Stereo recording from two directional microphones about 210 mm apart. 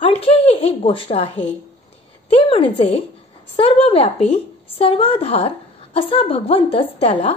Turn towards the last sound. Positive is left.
turn(degrees=30)  # may be behind; listen again after turning